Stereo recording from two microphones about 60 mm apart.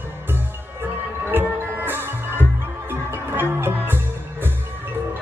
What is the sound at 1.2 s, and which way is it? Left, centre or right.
Music, right.